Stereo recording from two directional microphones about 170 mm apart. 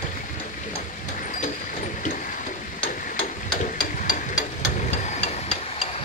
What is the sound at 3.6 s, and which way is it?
Hammer, 50° left (ahead or behind).